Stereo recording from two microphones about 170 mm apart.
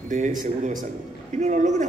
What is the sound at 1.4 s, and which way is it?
Speech, 45° right (ahead or behind).